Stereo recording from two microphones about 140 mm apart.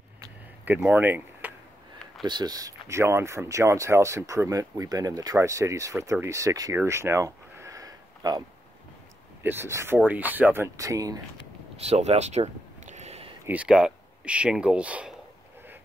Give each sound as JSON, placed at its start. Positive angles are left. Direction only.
{"t": 0.7, "sound": "speech", "side_deg": -15}
{"t": 2.2, "sound": "speech", "side_deg": -30}
{"t": 9.4, "sound": "speech", "side_deg": -15}
{"t": 11.8, "sound": "a sound", "side_deg": -50}
{"t": 13.5, "sound": "speech", "side_deg": -5}